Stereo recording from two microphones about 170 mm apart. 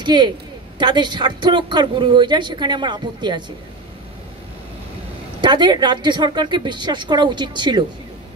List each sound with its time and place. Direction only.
0.0 s a woman's voice: 25° right (ahead or behind)
5.4 s a woman's voice: 25° right (ahead or behind)